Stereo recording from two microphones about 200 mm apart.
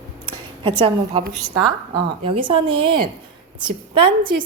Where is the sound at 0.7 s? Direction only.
25° right (ahead or behind).